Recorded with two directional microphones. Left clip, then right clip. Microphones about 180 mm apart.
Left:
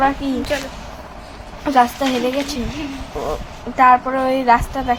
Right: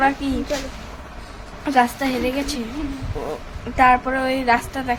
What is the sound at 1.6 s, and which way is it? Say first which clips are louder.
A woman's voice: left 3 dB; 20° left (ahead or behind).